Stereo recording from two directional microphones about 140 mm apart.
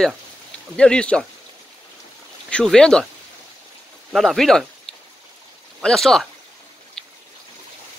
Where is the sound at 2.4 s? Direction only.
5° left (ahead or behind).